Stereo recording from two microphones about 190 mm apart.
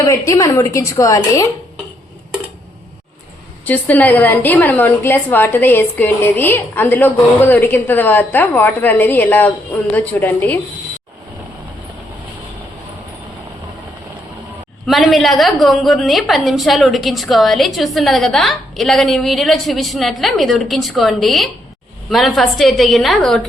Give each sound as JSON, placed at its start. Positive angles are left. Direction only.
{"t": 0.0, "sound": "a woman's voice", "side_deg": 15}
{"t": 3.7, "sound": "a woman's voice", "side_deg": 10}
{"t": 14.8, "sound": "a woman's voice", "side_deg": 0}